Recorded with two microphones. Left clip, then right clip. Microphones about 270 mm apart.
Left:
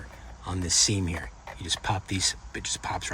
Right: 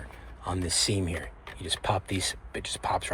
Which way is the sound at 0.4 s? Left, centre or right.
Centre.